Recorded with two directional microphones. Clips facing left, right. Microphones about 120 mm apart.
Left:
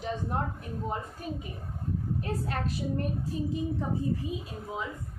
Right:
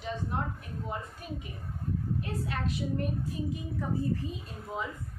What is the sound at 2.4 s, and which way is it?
Speech, 40° left (ahead or behind).